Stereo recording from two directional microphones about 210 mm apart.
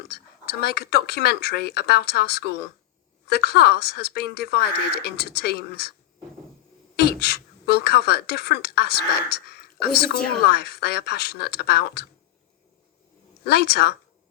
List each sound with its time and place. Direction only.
0.1 s speech: 50° left (ahead or behind)
6.9 s speech: 50° left (ahead or behind)
13.4 s speech: 50° left (ahead or behind)